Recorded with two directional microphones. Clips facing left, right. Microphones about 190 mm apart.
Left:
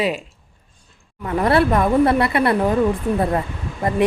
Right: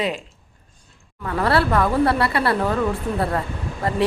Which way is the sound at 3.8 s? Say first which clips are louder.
Left 3 dB; 20° left (ahead or behind).